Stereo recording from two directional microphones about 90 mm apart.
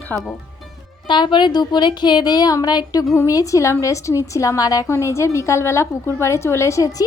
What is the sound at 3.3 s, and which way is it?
A woman's voice, 40° left (ahead or behind).